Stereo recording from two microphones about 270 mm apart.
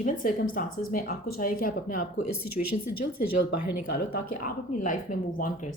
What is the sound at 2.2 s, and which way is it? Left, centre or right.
Speech, left.